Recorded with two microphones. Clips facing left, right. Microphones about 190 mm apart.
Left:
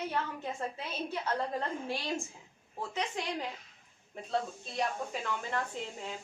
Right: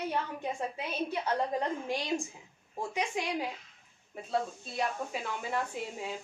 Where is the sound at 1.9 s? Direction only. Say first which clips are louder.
Right 3 dB; 15° right (ahead or behind).